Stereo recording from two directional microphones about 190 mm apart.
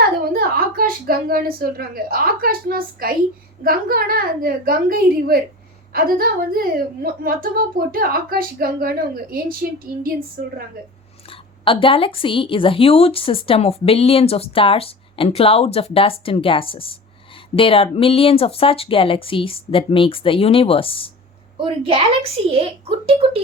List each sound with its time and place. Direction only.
0.3 s a woman's voice: 50° right (ahead or behind)
11.3 s a woman's voice: 25° left (ahead or behind)
21.6 s a woman's voice: 30° right (ahead or behind)